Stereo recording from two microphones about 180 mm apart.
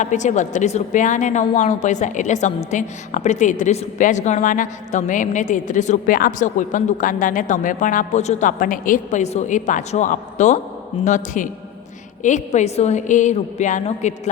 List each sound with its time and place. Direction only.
0.0 s a woman's voice: 40° left (ahead or behind)